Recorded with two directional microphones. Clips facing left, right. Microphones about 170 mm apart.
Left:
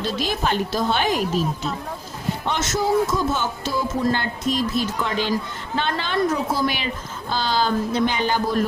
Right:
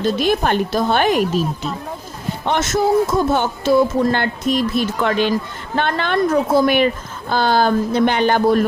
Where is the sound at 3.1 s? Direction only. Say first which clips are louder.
Right 6 dB; 60° right (ahead or behind).